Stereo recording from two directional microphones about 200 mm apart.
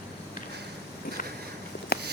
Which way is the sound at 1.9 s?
50° left (ahead or behind).